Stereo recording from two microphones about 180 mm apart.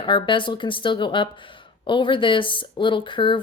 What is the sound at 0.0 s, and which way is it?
Speech, 25° left (ahead or behind).